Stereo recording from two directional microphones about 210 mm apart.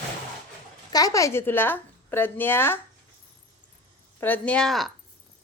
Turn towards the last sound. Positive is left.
turn(degrees=0)  # may be behind; listen again after turning